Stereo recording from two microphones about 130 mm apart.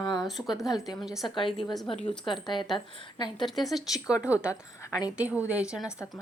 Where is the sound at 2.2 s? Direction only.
40° left (ahead or behind).